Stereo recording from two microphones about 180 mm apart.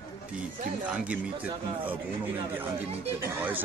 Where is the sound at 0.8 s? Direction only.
5° right (ahead or behind).